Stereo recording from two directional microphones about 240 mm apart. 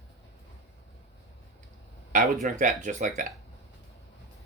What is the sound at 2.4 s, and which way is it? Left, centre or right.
Speech, right.